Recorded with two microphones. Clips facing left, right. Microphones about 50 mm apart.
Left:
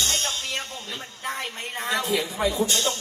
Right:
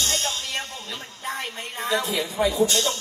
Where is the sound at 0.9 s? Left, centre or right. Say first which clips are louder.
Even; left.